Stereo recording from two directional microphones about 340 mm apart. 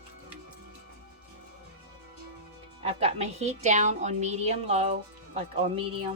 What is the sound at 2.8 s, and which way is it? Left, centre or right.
A woman's voice, centre.